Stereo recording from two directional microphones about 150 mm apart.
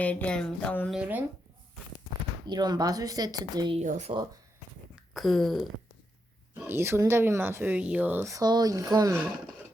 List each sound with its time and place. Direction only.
0.0 s a sound: 10° left (ahead or behind)
0.9 s speech: 5° right (ahead or behind)
2.5 s speech: 25° right (ahead or behind)
3.8 s speech: 50° right (ahead or behind)
5.1 s a sound: centre (ahead or behind)
6.5 s speech: 15° right (ahead or behind)